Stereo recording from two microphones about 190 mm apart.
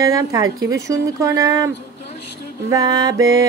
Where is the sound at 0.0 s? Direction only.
15° right (ahead or behind).